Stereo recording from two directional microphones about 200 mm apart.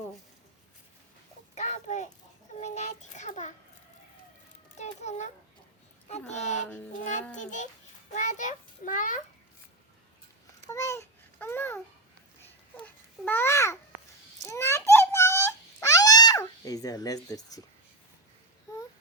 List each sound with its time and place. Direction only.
1.5 s a sound: 35° left (ahead or behind)
2.6 s a child's voice: 35° left (ahead or behind)
4.8 s a child's voice: 35° left (ahead or behind)
10.7 s speech: 15° left (ahead or behind)
12.4 s babbling: 10° left (ahead or behind)
14.4 s wail: 15° left (ahead or behind)